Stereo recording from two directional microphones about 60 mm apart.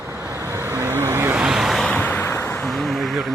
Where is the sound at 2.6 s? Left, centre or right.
Centre.